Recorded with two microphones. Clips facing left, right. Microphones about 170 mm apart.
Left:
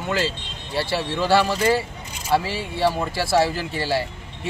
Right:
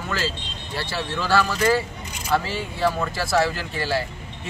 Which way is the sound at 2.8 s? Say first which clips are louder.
Left 2 dB; 30° left (ahead or behind).